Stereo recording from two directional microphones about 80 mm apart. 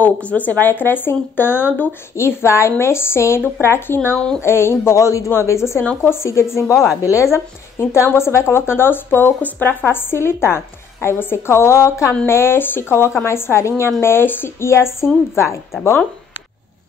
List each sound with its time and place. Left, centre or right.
0.0 s speech: centre; by 7.2 s left
7.3 s speech: left